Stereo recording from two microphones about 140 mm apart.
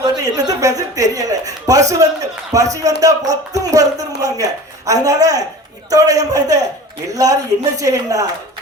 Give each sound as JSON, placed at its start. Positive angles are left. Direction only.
{"t": 0.0, "sound": "a man's voice", "side_deg": -25}